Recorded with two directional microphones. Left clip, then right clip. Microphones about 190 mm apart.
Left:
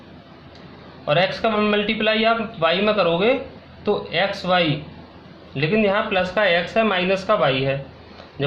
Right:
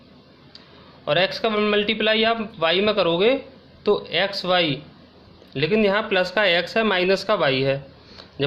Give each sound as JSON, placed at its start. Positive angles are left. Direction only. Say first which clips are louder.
{"t": 1.0, "sound": "a man's voice", "louder": "left 2 dB", "side_deg": -60}